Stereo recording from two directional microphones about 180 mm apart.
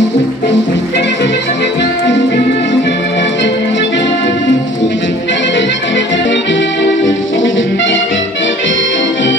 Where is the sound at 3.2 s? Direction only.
80° left.